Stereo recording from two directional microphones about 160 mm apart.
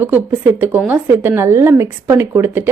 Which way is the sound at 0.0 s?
10° right (ahead or behind).